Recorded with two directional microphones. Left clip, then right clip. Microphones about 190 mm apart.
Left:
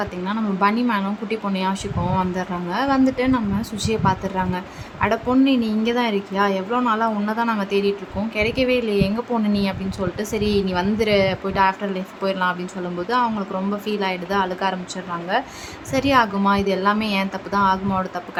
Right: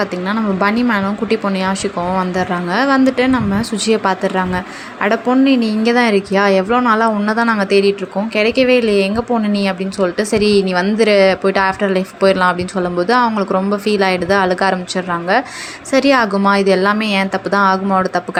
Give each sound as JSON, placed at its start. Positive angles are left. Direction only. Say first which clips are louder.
{"t": 0.0, "sound": "speech", "louder": "right 7 dB", "side_deg": -20}